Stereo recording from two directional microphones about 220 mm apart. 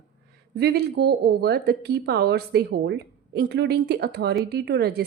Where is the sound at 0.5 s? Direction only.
45° right (ahead or behind).